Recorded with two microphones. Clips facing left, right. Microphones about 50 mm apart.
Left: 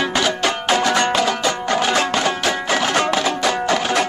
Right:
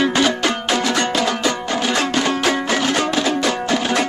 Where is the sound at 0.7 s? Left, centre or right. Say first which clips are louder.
Left 5 dB; left.